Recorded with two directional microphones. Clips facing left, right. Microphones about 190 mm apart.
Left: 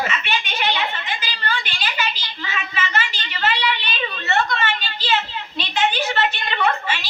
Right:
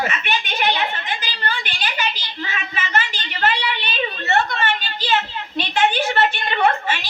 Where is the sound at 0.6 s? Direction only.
45° right (ahead or behind).